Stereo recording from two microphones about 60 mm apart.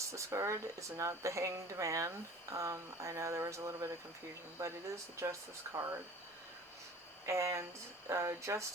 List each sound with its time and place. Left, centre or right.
0.0 s speech: right
7.3 s speech: right